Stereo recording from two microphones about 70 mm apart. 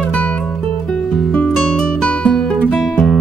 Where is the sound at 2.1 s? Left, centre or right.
Centre.